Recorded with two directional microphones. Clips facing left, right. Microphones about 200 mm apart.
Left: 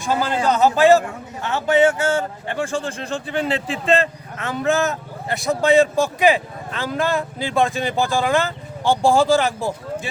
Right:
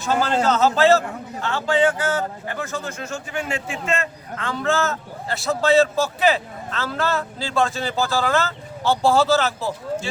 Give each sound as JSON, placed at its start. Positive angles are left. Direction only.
{"t": 0.0, "sound": "a man's voice", "side_deg": 10}
{"t": 4.4, "sound": "speech", "side_deg": 20}